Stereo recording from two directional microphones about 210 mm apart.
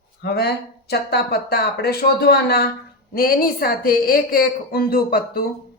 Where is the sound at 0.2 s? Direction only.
50° left (ahead or behind).